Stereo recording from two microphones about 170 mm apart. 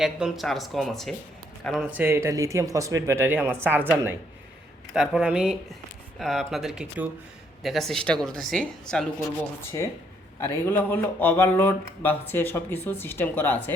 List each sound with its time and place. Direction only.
0.0 s speech: centre (ahead or behind)
9.8 s speech: 15° left (ahead or behind)